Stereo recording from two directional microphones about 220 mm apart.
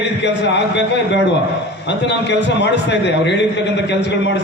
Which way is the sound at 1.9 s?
50° left (ahead or behind).